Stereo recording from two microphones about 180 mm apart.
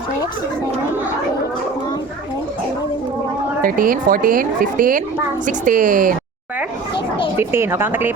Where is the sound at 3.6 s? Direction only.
50° right (ahead or behind).